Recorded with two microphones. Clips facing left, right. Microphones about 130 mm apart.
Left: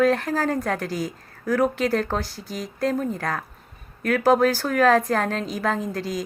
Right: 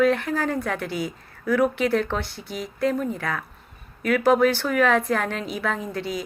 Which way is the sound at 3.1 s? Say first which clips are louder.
Left 1 dB; 40° left (ahead or behind).